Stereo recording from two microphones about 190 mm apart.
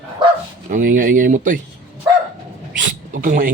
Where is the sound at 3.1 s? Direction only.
45° right (ahead or behind).